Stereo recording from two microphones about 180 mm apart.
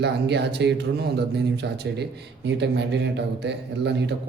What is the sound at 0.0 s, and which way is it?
Speech, 70° right (ahead or behind).